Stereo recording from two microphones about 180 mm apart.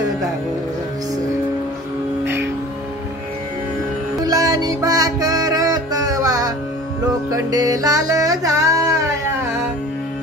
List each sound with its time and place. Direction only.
4.2 s music: 20° right (ahead or behind)